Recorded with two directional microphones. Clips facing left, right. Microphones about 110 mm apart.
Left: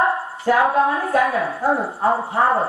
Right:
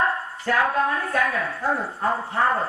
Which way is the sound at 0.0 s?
20° left (ahead or behind).